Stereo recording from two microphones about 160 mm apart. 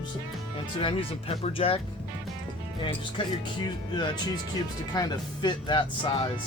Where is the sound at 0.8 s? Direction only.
35° left (ahead or behind).